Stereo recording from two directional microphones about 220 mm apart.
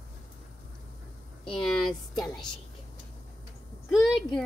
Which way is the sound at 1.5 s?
20° left (ahead or behind).